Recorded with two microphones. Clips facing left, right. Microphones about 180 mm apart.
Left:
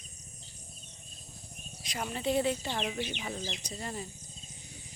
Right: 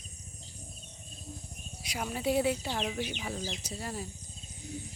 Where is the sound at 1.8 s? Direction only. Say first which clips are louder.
Right 1 dB; 5° right (ahead or behind).